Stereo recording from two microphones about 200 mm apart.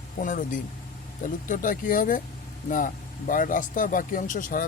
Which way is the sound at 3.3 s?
45° left (ahead or behind).